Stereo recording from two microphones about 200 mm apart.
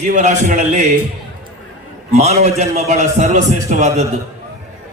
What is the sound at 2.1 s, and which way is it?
A man's voice, 35° right (ahead or behind).